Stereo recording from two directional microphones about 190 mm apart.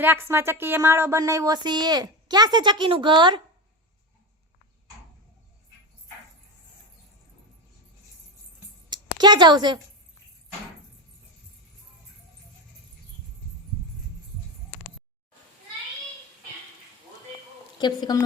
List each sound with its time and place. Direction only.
0.0 s speech: 10° right (ahead or behind)
8.9 s a sound: 20° right (ahead or behind)
17.7 s a woman's voice: 20° left (ahead or behind)